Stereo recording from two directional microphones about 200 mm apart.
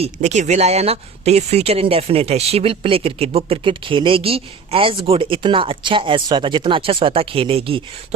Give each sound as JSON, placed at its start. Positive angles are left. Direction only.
{"t": 0.0, "sound": "speech", "side_deg": -35}